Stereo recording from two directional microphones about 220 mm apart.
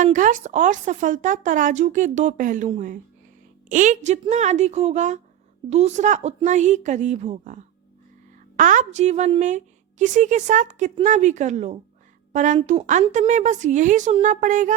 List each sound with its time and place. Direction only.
0.0 s a woman's voice: 35° right (ahead or behind)